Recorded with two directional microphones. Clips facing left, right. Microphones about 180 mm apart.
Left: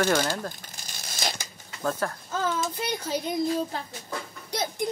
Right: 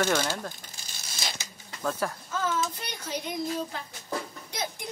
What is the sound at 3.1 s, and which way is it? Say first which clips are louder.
Speech: left 4 dB; 35° left (ahead or behind).